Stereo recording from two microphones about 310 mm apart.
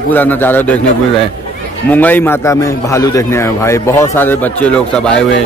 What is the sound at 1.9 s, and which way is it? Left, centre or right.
A man's voice, centre.